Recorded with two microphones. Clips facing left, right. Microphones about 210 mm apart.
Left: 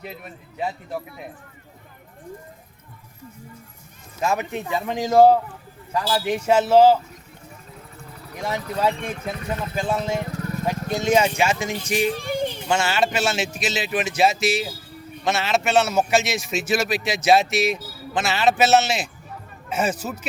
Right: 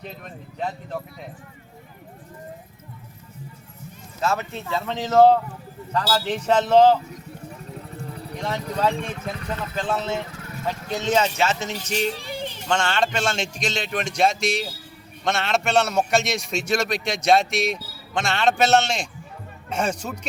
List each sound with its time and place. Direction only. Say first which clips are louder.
0.0 s speech: even; 10° left (ahead or behind)
4.2 s speech: left 2 dB; 15° left (ahead or behind)
8.4 s speech: left 1 dB; 10° left (ahead or behind)
10.2 s vehicle: left 7 dB; 40° left (ahead or behind)
10.9 s speech: left 2 dB; 10° left (ahead or behind)
12.1 s a sound: left 7 dB; 50° left (ahead or behind)
12.6 s a man's voice: right 1 dB; 10° left (ahead or behind)